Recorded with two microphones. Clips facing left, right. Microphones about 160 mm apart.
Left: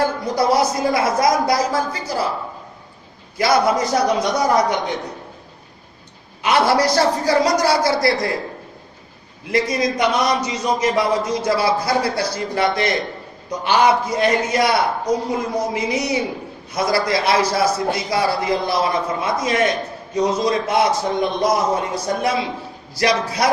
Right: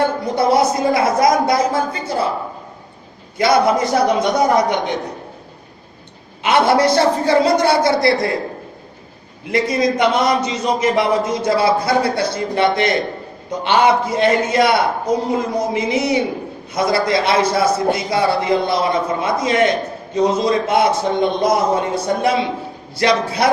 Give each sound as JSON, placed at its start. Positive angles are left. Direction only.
{"t": 0.3, "sound": "a man's voice", "side_deg": -25}
{"t": 3.3, "sound": "a man's voice", "side_deg": -25}
{"t": 6.4, "sound": "a man's voice", "side_deg": -25}
{"t": 9.5, "sound": "a man's voice", "side_deg": -25}